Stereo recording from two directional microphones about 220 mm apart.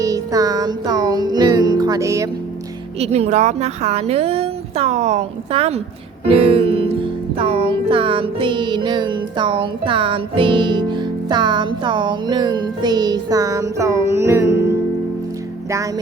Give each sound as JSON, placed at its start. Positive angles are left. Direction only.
{"t": 0.0, "sound": "music", "side_deg": -15}
{"t": 3.0, "sound": "music", "side_deg": -30}